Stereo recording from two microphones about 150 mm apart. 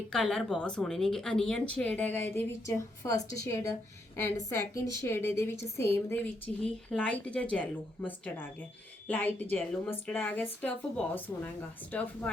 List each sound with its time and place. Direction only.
0.1 s a woman's voice: 5° left (ahead or behind)